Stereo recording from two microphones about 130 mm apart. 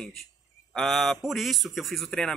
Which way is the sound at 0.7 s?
Centre (ahead or behind).